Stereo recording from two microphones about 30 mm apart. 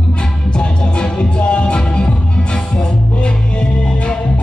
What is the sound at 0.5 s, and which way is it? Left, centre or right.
Music, left.